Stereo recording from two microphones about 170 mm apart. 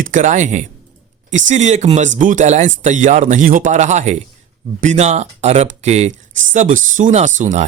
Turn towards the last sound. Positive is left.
turn(degrees=-45)  # may be behind; listen again after turning